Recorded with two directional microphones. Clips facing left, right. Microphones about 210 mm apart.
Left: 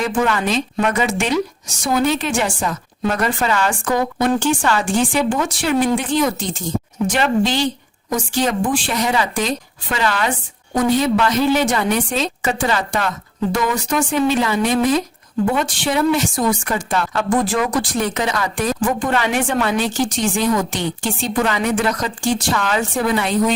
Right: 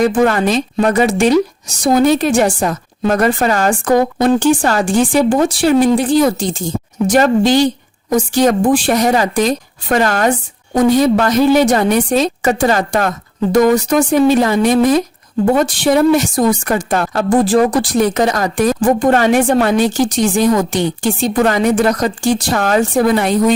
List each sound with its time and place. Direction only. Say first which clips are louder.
0.0 s a woman's voice: right 7 dB; 40° right (ahead or behind)
7.2 s a woman's voice: right 7 dB; 40° right (ahead or behind)